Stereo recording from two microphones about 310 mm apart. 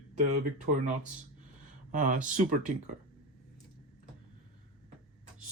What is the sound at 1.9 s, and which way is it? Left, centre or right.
Speech, right.